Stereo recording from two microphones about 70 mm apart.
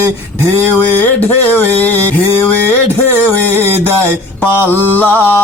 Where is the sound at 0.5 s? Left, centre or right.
Left.